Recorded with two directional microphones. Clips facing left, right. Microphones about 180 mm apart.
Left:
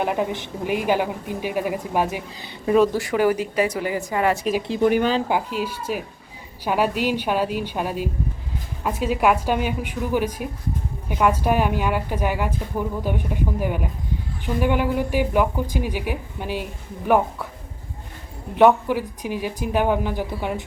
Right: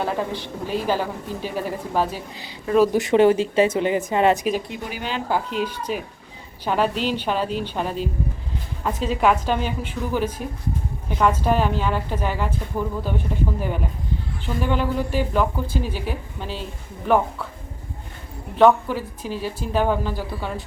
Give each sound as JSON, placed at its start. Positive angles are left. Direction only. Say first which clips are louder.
{"t": 0.0, "sound": "a woman's voice", "louder": "left 2 dB", "side_deg": 15}
{"t": 2.9, "sound": "speech", "louder": "right 4 dB", "side_deg": -25}
{"t": 4.8, "sound": "speech", "louder": "left 12 dB", "side_deg": 50}
{"t": 5.3, "sound": "a woman's voice", "louder": "even", "side_deg": 5}
{"t": 18.5, "sound": "a woman's voice", "louder": "even", "side_deg": 15}